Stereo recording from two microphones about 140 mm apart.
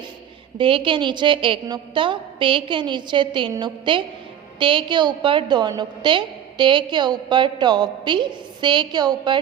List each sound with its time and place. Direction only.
0.6 s a woman's voice: 35° right (ahead or behind)